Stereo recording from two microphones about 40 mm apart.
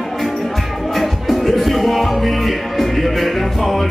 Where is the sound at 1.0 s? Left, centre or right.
Centre.